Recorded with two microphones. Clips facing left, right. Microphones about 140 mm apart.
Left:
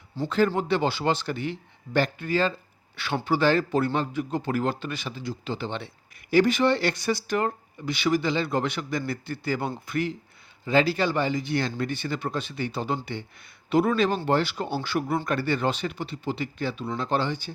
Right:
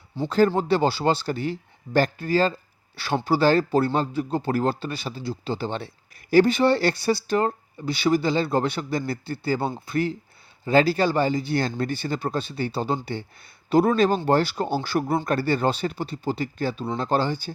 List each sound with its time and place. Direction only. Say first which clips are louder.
0.3 s speech: right 4 dB; 35° right (ahead or behind)